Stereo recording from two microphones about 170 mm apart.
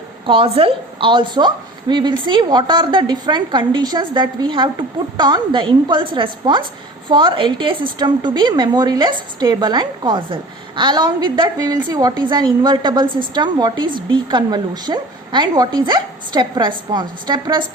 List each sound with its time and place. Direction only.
0.3 s a woman's voice: 35° right (ahead or behind)